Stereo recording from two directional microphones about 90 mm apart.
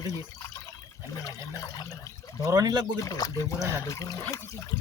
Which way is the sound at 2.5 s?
45° right (ahead or behind).